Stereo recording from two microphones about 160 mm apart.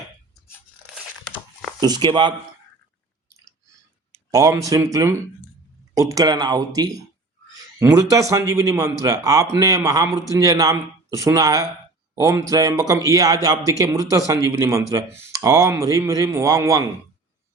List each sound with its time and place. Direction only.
1.8 s speech: 25° right (ahead or behind)
4.3 s speech: 20° right (ahead or behind)